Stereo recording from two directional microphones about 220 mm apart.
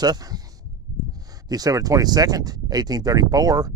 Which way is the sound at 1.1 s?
15° right (ahead or behind).